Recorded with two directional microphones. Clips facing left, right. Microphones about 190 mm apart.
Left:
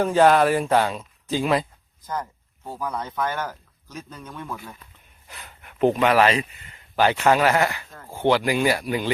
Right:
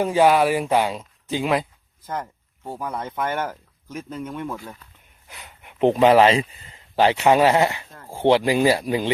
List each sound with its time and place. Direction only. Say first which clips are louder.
0.0 s speech: even; 10° right (ahead or behind)
2.7 s speech: even; 25° right (ahead or behind)